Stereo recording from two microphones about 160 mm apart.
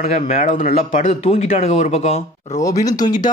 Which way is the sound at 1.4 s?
40° left (ahead or behind).